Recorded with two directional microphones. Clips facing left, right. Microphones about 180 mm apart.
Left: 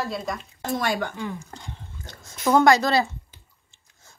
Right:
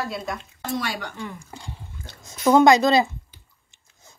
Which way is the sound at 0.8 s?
50° left (ahead or behind).